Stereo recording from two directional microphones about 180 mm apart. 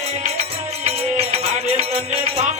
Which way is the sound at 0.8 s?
35° right (ahead or behind).